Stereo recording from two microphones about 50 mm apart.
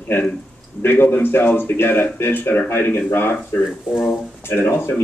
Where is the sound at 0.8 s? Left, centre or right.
Left.